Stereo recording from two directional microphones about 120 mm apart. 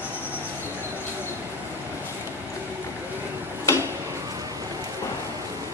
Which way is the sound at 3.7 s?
25° left (ahead or behind).